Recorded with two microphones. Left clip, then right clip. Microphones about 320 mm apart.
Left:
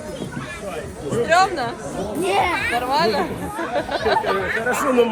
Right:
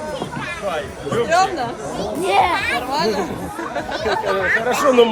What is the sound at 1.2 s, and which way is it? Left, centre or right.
Speech, centre.